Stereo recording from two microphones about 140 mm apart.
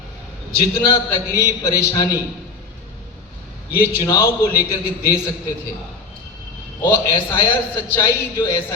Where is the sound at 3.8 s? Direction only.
20° left (ahead or behind).